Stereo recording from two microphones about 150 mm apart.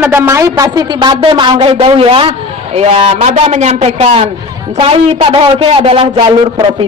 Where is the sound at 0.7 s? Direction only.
30° right (ahead or behind).